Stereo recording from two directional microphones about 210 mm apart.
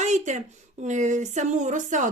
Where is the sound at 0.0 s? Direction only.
35° right (ahead or behind).